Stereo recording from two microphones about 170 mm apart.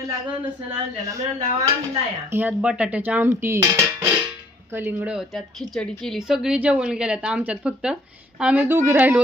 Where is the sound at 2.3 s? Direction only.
10° right (ahead or behind).